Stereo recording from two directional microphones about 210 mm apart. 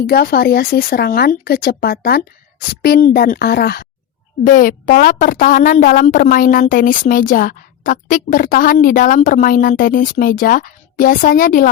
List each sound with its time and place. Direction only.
0.0 s a woman's voice: 45° left (ahead or behind)